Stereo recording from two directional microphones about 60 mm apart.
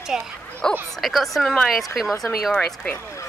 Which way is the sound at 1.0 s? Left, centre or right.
Centre.